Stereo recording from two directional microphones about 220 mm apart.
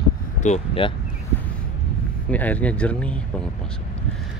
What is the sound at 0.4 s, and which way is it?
Speech, 25° left (ahead or behind).